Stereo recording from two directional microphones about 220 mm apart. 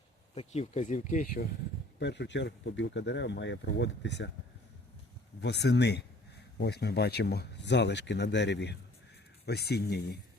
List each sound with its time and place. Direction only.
0.3 s speech: 30° left (ahead or behind)
2.0 s speech: 50° left (ahead or behind)
5.4 s speech: 50° left (ahead or behind)